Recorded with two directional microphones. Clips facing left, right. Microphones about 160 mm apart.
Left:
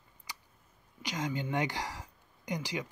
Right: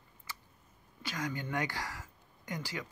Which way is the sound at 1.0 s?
20° left (ahead or behind).